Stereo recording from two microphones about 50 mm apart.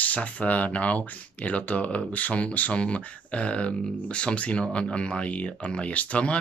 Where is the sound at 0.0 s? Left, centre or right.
Left.